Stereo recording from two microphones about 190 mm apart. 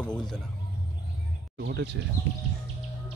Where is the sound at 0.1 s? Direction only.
5° left (ahead or behind).